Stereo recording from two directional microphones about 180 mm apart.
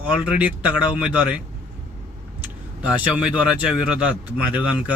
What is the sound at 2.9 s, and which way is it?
Speech, 5° right (ahead or behind).